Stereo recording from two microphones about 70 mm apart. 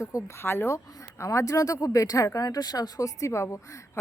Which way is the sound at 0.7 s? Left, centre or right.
Left.